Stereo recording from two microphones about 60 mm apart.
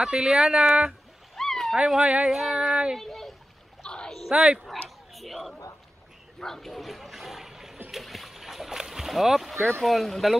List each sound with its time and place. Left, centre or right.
0.0 s speech: centre
1.3 s a sound: centre
2.0 s speech: centre
2.3 s speech: centre
3.0 s splash: centre
3.8 s a sound: centre
4.3 s speech: centre
4.8 s dog: centre
6.4 s speech: centre
7.9 s boat: centre
9.8 s speech: centre